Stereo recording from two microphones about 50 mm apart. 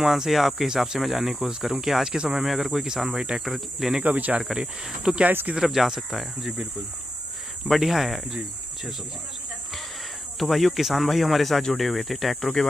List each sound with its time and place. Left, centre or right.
0.0 s speech: centre
2.1 s speech: centre
2.4 s speech: centre
3.4 s speech: centre
4.0 s speech: right
4.4 s speech: centre
7.6 s speech: centre
10.4 s speech: centre